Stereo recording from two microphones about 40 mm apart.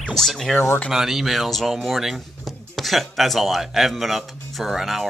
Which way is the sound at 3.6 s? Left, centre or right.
Centre.